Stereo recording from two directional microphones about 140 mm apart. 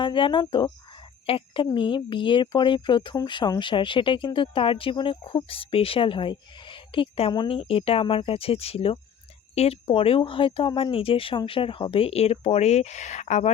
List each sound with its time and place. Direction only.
0.0 s speech: 35° left (ahead or behind); by 13.5 s 60° left (ahead or behind)